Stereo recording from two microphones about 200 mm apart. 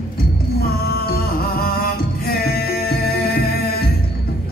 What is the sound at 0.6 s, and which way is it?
Music, 50° left (ahead or behind).